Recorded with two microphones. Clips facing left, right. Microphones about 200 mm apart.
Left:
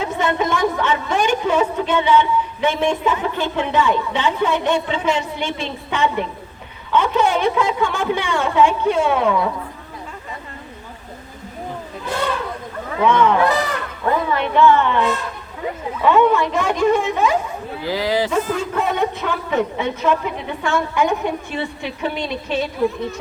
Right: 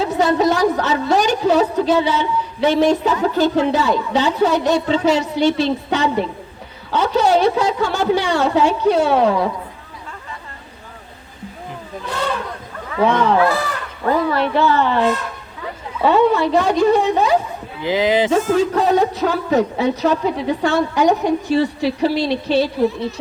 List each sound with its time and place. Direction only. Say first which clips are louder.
0.0 s a woman's voice: right 5 dB; 35° right (ahead or behind)
13.0 s a woman's voice: even; 35° right (ahead or behind)
14.3 s a woman's voice: left 1 dB; 35° right (ahead or behind)
16.0 s a woman's voice: right 1 dB; 35° right (ahead or behind)
17.8 s speech: right 4 dB; 20° right (ahead or behind)
18.4 s a woman's voice: right 6 dB; 40° right (ahead or behind)